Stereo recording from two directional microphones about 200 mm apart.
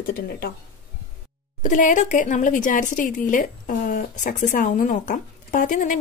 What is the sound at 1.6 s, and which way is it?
A woman's voice, 40° left (ahead or behind).